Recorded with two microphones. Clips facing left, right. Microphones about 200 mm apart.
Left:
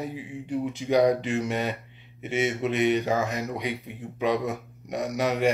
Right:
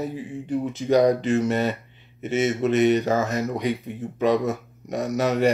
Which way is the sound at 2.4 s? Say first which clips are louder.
Right 5 dB; 40° right (ahead or behind).